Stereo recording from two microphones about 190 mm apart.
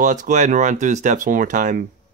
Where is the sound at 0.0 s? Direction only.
40° right (ahead or behind).